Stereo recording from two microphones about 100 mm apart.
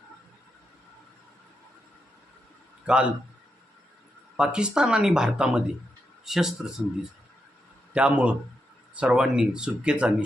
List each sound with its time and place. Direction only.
2.8 s a man's voice: 10° right (ahead or behind)
4.4 s speech: 10° right (ahead or behind)
7.9 s speech: 10° right (ahead or behind)